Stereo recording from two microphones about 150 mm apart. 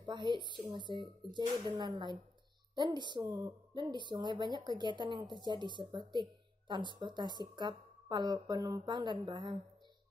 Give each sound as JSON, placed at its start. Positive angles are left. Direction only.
{"t": 0.0, "sound": "a woman's voice", "side_deg": -30}